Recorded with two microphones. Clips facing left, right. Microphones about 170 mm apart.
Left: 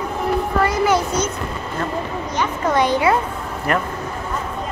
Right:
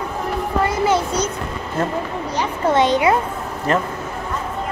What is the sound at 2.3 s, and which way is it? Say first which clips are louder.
Speech: right 2 dB; 25° right (ahead or behind).